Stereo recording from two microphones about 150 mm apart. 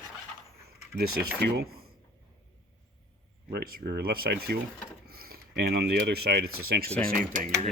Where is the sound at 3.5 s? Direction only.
80° right.